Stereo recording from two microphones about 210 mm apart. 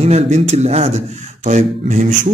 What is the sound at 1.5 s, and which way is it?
Mantra, 35° right (ahead or behind).